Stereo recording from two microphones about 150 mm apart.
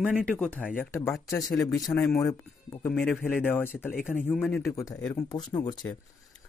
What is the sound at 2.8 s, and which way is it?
A man's voice, 15° left (ahead or behind).